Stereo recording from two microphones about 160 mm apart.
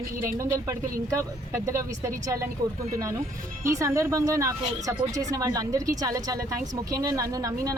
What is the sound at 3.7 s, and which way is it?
Speech, 20° right (ahead or behind).